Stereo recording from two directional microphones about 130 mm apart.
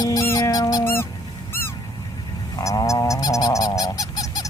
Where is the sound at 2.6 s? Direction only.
25° left (ahead or behind).